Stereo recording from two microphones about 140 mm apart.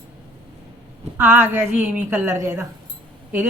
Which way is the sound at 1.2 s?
10° right (ahead or behind).